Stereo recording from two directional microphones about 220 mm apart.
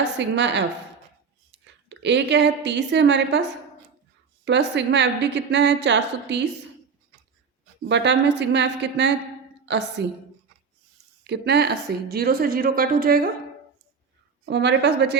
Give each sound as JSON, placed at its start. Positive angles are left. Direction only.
{"t": 0.2, "sound": "a woman's voice", "side_deg": -55}
{"t": 4.4, "sound": "speech", "side_deg": -55}
{"t": 7.9, "sound": "speech", "side_deg": -55}
{"t": 11.2, "sound": "speech", "side_deg": -50}
{"t": 14.4, "sound": "speech", "side_deg": -50}